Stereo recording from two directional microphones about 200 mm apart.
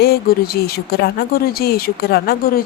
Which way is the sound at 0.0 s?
50° left (ahead or behind).